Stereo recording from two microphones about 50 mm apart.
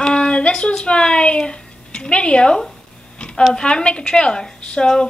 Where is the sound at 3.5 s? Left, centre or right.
Centre.